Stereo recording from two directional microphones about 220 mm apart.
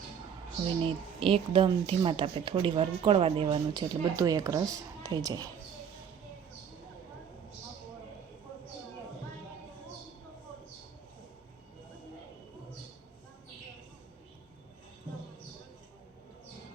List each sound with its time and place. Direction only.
0.8 s a woman's voice: 25° right (ahead or behind)